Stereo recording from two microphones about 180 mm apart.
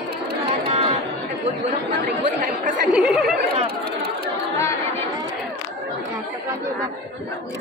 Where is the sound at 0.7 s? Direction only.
30° right (ahead or behind).